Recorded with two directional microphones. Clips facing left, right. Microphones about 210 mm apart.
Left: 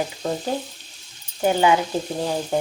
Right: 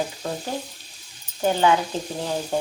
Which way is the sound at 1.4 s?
10° left (ahead or behind).